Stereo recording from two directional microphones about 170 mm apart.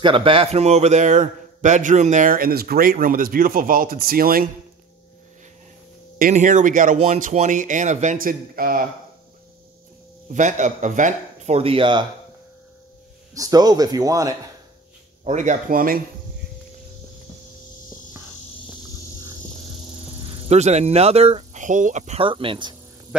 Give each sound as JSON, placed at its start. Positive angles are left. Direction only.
{"t": 0.0, "sound": "a man's voice", "side_deg": -30}
{"t": 6.1, "sound": "a man's voice", "side_deg": -50}
{"t": 10.3, "sound": "a man's voice", "side_deg": -45}
{"t": 13.3, "sound": "speech", "side_deg": -20}
{"t": 15.2, "sound": "a man's voice", "side_deg": -45}
{"t": 20.2, "sound": "speech", "side_deg": -40}